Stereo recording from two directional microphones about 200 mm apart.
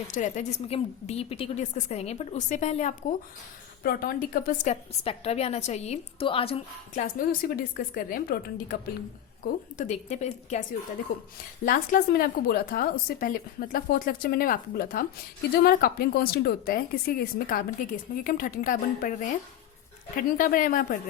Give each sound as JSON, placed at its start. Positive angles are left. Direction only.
{"t": 0.1, "sound": "a woman's voice", "side_deg": 35}
{"t": 3.8, "sound": "a woman's voice", "side_deg": 45}